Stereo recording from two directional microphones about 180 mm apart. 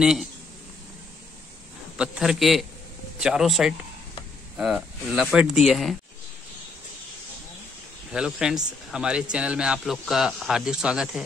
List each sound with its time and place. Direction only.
0.0 s speech: 5° right (ahead or behind)
2.0 s speech: 5° right (ahead or behind)
8.1 s speech: 5° right (ahead or behind)